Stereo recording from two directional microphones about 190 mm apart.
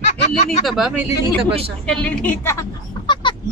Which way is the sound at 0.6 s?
Centre (ahead or behind).